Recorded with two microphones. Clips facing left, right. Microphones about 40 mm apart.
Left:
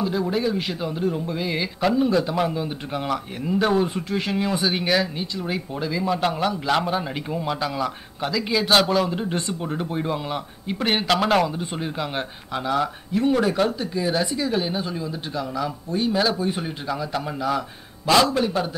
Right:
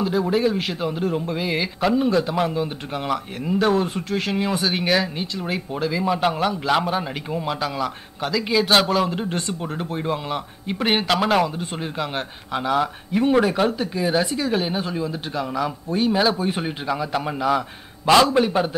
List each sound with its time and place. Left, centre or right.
0.1 s speech: centre
0.7 s a man's voice: right
3.6 s speech: centre
11.1 s a man's voice: centre; by 18.8 s right